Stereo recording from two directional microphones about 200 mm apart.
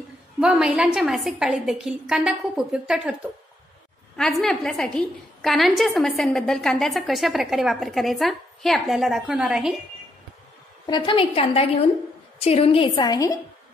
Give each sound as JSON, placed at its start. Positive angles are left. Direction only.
{"t": 0.4, "sound": "a woman's voice", "side_deg": -5}
{"t": 10.9, "sound": "a woman's voice", "side_deg": 25}